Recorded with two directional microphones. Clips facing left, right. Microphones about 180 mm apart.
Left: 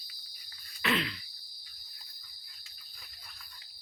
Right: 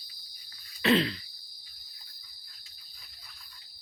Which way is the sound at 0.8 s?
30° right (ahead or behind).